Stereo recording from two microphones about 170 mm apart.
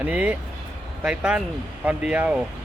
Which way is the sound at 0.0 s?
10° right (ahead or behind).